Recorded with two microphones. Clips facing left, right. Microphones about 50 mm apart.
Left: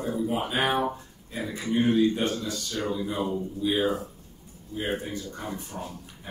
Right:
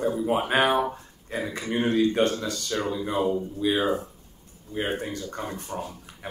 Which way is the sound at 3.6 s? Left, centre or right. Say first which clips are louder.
Even; right.